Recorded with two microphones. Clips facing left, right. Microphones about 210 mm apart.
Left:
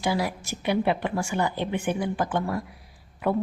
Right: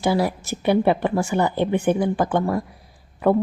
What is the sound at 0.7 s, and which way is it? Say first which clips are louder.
Speech: right 6 dB; 40° right (ahead or behind).